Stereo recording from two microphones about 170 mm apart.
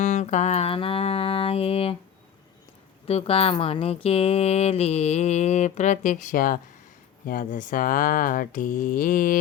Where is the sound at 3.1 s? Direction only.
35° left (ahead or behind); by 9.4 s 55° left (ahead or behind).